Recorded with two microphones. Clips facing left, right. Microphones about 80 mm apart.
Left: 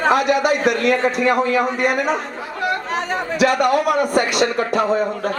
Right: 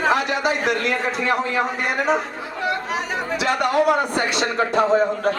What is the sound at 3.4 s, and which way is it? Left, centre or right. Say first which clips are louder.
A man's voice: left 4 dB; right.